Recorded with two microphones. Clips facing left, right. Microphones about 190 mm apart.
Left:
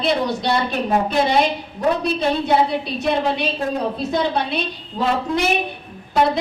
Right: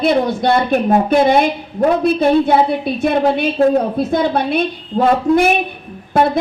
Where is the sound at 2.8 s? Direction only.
50° right (ahead or behind).